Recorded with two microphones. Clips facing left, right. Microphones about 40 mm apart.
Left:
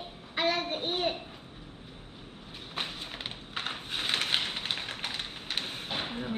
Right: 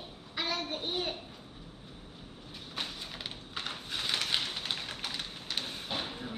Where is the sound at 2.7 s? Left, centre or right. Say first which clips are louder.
Left 3 dB; left.